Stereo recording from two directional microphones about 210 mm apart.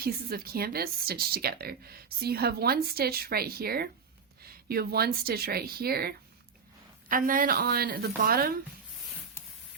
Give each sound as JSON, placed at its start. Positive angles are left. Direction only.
{"t": 0.0, "sound": "speech", "side_deg": -45}